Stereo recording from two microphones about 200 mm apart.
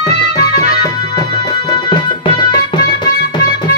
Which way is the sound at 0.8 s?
20° left (ahead or behind).